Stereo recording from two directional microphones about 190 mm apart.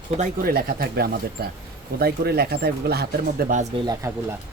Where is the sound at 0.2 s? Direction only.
50° right (ahead or behind).